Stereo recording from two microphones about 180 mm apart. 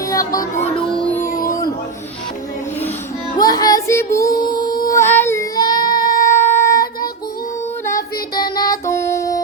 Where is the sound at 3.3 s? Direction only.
20° left (ahead or behind).